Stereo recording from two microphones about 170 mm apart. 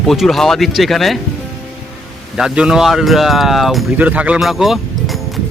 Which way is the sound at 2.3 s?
5° right (ahead or behind).